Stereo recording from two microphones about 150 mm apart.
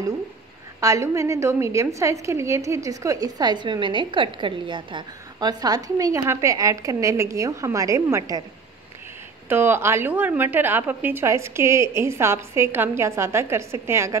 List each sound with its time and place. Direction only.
0.7 s a woman's voice: 20° right (ahead or behind)
9.5 s a woman's voice: 15° right (ahead or behind)